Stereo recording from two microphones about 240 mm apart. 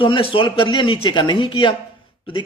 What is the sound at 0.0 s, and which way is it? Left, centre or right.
A man's voice, left.